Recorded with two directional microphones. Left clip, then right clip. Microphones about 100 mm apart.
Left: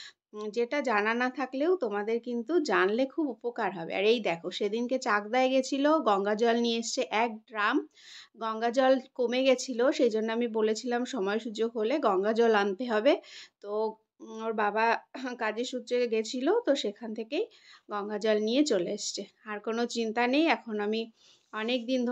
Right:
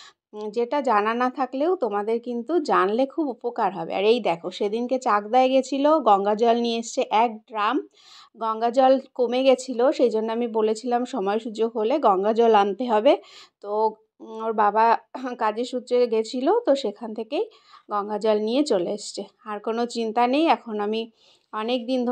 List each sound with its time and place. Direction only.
0.6 s speech: 30° right (ahead or behind)